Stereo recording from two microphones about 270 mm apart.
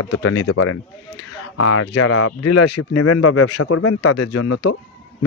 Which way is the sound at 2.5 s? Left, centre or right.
Left.